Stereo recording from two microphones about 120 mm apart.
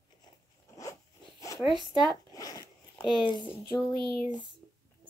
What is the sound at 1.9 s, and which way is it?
Zipper, 30° left (ahead or behind).